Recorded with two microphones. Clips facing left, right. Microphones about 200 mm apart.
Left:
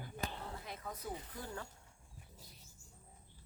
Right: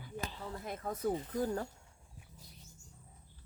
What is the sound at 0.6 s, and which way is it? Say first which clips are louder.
Speech: right 13 dB; 50° right (ahead or behind).